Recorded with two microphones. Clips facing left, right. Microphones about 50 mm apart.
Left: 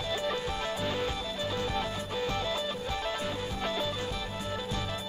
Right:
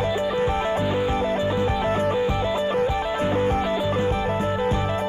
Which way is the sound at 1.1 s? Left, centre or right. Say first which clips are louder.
Right 11 dB; right.